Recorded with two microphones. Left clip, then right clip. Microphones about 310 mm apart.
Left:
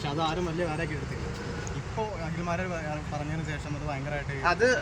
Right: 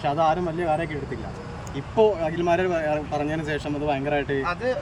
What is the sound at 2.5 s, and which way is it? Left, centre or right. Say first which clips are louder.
Speech: right 10 dB; right.